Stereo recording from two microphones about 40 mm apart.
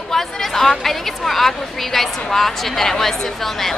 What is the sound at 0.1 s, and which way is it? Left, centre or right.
A woman's voice, centre.